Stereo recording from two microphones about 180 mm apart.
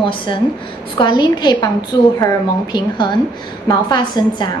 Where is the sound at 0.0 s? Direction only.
30° left (ahead or behind).